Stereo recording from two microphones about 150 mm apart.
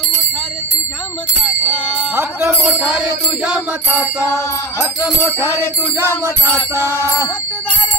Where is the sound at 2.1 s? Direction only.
15° right (ahead or behind).